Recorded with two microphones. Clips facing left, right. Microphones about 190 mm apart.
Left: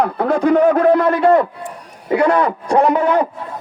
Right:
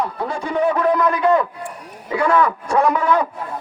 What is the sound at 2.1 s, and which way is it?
A man's voice, 35° left (ahead or behind).